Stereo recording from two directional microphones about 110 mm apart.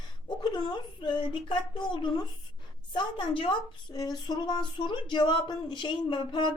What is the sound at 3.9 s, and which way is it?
Speech, 40° left (ahead or behind).